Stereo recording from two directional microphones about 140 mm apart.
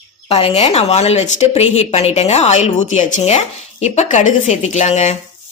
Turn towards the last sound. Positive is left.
turn(degrees=50)  # may be behind; listen again after turning